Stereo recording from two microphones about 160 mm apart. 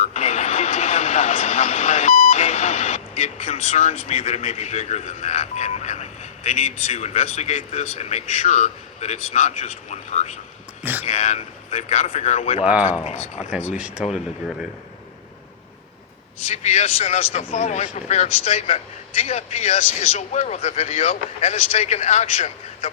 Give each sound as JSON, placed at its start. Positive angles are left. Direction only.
{"t": 0.0, "sound": "speech", "side_deg": 45}
{"t": 13.7, "sound": "speech", "side_deg": -5}
{"t": 16.5, "sound": "speech", "side_deg": 45}